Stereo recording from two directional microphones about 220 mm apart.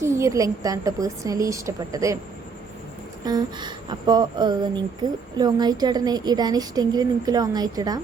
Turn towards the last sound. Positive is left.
turn(degrees=-15)  # may be behind; listen again after turning